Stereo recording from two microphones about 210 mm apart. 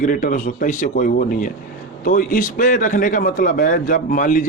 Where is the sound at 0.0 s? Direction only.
40° left (ahead or behind).